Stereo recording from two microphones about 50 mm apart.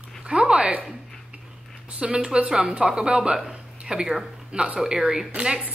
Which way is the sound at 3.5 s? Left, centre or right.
Centre.